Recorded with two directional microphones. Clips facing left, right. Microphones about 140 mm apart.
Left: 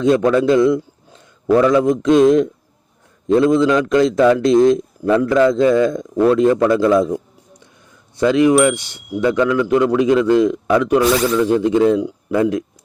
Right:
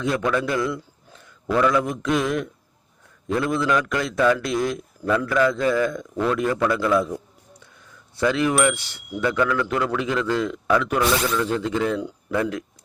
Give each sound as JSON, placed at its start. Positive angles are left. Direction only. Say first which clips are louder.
{"t": 0.3, "sound": "a man's voice", "louder": "left 10 dB", "side_deg": 25}
{"t": 1.5, "sound": "a man's voice", "louder": "left 7 dB", "side_deg": 35}
{"t": 2.0, "sound": "a man's voice", "louder": "left 11 dB", "side_deg": 25}
{"t": 8.2, "sound": "a man's voice", "louder": "left 8 dB", "side_deg": 20}